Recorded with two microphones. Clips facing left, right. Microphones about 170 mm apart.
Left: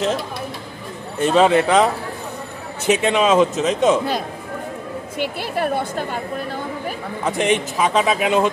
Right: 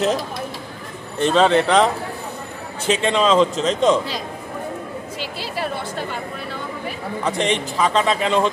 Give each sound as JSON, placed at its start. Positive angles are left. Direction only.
{"t": 1.2, "sound": "a man's voice", "side_deg": 10}
{"t": 2.9, "sound": "a man's voice", "side_deg": 10}
{"t": 5.2, "sound": "a woman's voice", "side_deg": 55}
{"t": 7.2, "sound": "a man's voice", "side_deg": 10}